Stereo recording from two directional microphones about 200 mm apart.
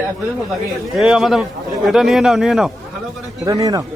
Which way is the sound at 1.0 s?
Centre (ahead or behind).